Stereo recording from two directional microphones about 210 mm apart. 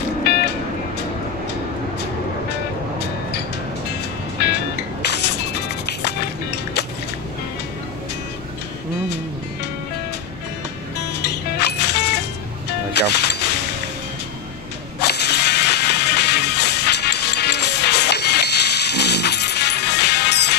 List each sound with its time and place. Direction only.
0.2 s music: 50° left (ahead or behind)
4.4 s music: 50° left (ahead or behind)
11.1 s music: 50° left (ahead or behind)
15.0 s music: 50° left (ahead or behind)